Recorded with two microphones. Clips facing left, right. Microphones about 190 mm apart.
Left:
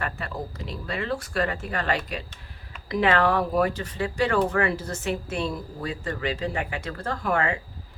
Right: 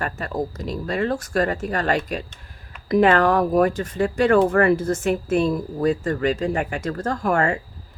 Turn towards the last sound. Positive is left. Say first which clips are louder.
# right 5 dB
turn(degrees=-45)  # may be behind; listen again after turning